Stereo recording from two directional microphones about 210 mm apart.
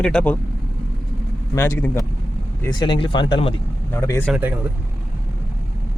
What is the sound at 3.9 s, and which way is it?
Speech, 10° left (ahead or behind).